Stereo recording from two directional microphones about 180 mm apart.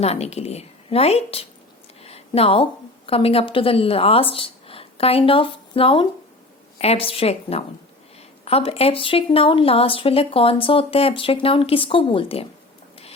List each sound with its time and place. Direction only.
0.0 s speech: 35° left (ahead or behind)
2.0 s a sound: 35° left (ahead or behind)
3.1 s speech: 30° left (ahead or behind)